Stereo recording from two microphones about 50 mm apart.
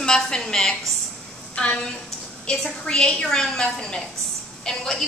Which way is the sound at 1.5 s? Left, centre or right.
Left.